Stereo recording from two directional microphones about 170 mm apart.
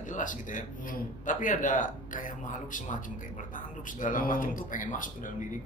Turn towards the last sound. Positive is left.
turn(degrees=50)  # may be behind; listen again after turning